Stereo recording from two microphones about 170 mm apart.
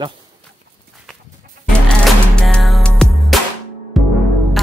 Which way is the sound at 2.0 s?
5° left (ahead or behind).